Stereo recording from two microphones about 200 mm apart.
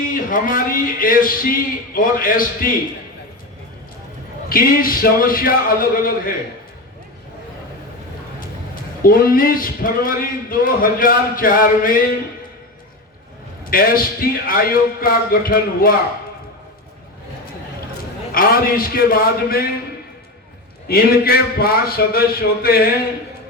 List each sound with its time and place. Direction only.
0.0 s a man's voice: 40° left (ahead or behind)
4.4 s a man's voice: 45° left (ahead or behind)
8.4 s a man's voice: 45° left (ahead or behind)
13.7 s a man's voice: 45° left (ahead or behind)
18.3 s a man's voice: 45° left (ahead or behind)
20.8 s a man's voice: 50° left (ahead or behind)